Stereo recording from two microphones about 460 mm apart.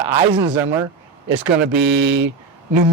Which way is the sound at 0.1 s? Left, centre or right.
Centre.